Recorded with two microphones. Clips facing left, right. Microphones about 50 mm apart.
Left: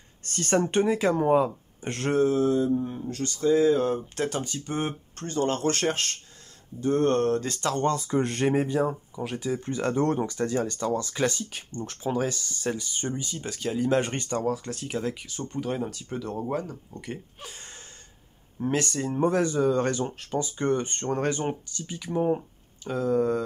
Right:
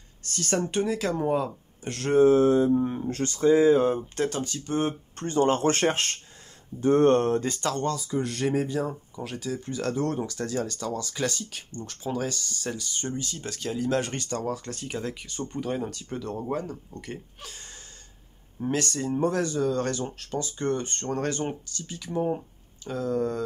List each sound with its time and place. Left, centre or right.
0.2 s speech: left
2.2 s speech: right
3.4 s speech: centre
4.1 s speech: centre
5.1 s speech: centre
7.4 s speech: centre
8.0 s speech: left
8.5 s speech: centre
14.4 s speech: centre
17.4 s speech: centre